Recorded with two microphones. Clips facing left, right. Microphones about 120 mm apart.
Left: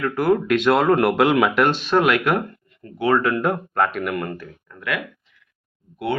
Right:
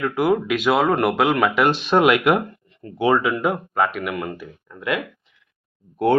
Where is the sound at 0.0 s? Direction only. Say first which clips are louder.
Even; 10° right (ahead or behind).